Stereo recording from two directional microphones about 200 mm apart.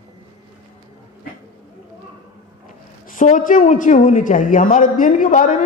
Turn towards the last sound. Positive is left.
turn(degrees=40)  # may be behind; listen again after turning